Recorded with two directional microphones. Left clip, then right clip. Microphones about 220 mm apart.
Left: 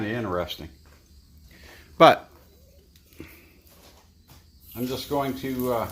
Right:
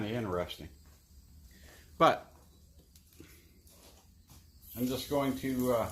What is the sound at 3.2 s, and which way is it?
Sniff, 35° left (ahead or behind).